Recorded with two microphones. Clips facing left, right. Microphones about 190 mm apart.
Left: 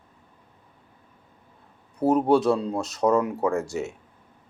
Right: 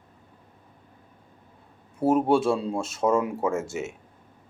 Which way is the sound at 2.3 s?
25° right (ahead or behind).